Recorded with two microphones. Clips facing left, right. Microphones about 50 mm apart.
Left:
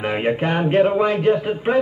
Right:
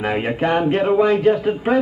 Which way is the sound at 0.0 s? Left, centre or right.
Left.